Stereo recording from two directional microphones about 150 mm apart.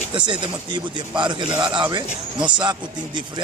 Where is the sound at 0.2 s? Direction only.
30° right (ahead or behind).